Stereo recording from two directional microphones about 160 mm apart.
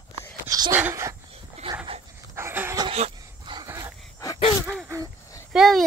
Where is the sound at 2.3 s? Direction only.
15° right (ahead or behind).